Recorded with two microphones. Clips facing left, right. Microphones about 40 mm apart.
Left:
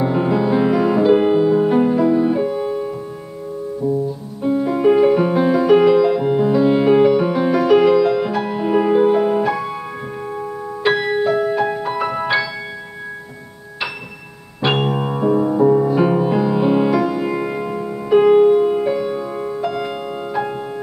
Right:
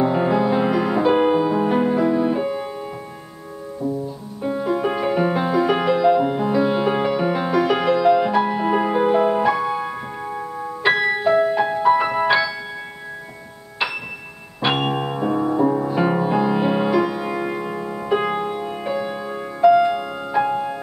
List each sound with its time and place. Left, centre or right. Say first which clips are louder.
0.0 s music: left 1 dB; centre
4.4 s music: left 4 dB; centre
14.6 s music: left 2 dB; centre
20.3 s music: right 5 dB; centre